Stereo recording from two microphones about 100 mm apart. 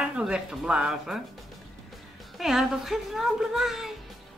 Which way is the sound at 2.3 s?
5° right (ahead or behind).